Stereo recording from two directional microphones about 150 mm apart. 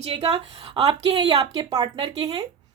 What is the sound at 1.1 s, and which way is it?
A woman's voice, 25° right (ahead or behind).